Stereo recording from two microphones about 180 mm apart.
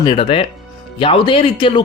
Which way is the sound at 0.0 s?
30° left (ahead or behind).